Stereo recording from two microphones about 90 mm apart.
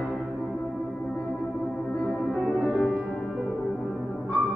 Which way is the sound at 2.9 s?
10° right (ahead or behind).